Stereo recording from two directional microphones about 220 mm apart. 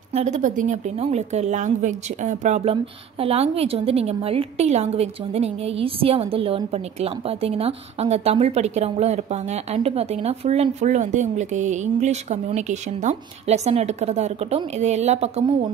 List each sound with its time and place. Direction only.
0.1 s a woman's voice: 30° right (ahead or behind)